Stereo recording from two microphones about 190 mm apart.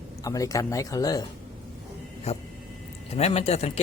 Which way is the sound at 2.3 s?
35° left (ahead or behind).